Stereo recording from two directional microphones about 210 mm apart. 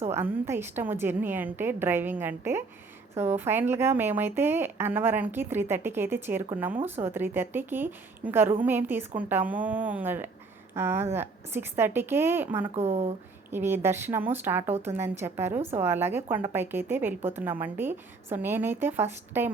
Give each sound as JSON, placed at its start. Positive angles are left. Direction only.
{"t": 0.1, "sound": "a woman's voice", "side_deg": -10}
{"t": 12.9, "sound": "speech", "side_deg": -30}
{"t": 13.5, "sound": "a woman's voice", "side_deg": -10}